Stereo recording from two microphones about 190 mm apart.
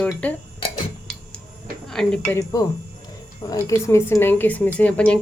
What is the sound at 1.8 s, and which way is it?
Speech, 5° left (ahead or behind).